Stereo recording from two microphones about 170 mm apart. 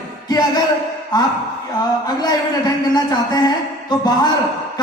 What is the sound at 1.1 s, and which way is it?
Speech, 25° left (ahead or behind).